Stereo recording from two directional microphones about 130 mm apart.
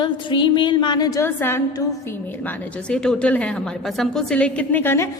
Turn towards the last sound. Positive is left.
turn(degrees=20)  # may be behind; listen again after turning